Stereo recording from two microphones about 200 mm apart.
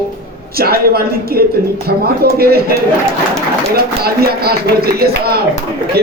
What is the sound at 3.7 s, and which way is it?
Speech, 50° right (ahead or behind).